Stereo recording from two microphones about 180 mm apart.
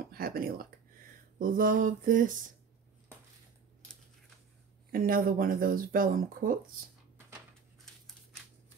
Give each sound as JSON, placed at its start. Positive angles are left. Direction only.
{"t": 0.0, "sound": "a sound", "side_deg": -55}
{"t": 1.4, "sound": "speech", "side_deg": -50}
{"t": 4.9, "sound": "speech", "side_deg": -50}